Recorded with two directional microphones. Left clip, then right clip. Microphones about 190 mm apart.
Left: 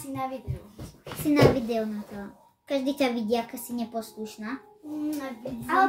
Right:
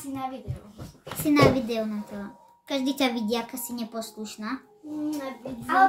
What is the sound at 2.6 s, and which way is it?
A woman's voice, 30° right (ahead or behind).